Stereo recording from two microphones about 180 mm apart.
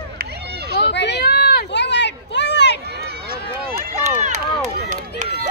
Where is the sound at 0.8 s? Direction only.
70° left (ahead or behind).